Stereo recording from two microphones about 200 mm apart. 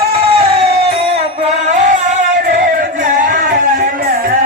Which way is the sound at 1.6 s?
35° right (ahead or behind).